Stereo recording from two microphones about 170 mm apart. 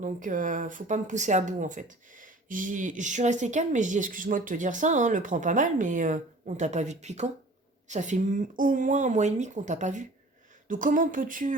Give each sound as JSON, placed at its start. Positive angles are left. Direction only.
{"t": 0.0, "sound": "speech", "side_deg": -50}